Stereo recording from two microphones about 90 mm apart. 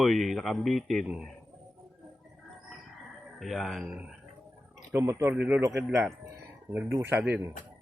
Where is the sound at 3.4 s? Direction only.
Centre (ahead or behind).